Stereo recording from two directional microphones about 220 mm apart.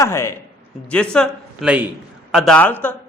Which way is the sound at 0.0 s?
10° left (ahead or behind).